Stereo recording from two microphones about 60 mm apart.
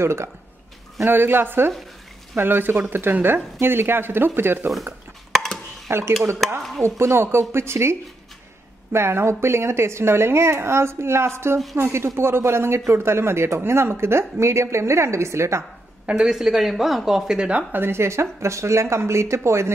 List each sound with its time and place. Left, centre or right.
0.0 s speech: right
1.0 s speech: right
5.3 s chop: centre
5.9 s speech: right
6.4 s speech: centre
6.8 s speech: right
16.3 s speech: centre
17.4 s speech: right
17.7 s speech: right